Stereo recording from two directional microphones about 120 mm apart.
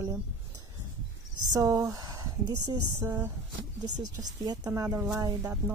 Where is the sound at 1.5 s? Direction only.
30° right (ahead or behind).